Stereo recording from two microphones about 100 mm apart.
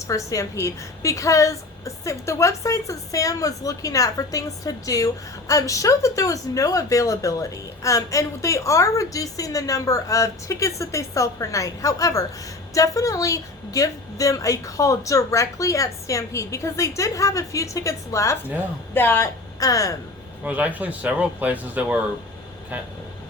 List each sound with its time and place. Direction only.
0.1 s a woman's voice: 30° left (ahead or behind)
18.9 s speech: 20° left (ahead or behind)
19.5 s speech: 35° left (ahead or behind)
20.4 s speech: 15° right (ahead or behind)